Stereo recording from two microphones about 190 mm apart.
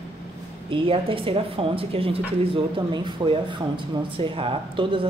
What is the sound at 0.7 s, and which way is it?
Speech, 30° right (ahead or behind).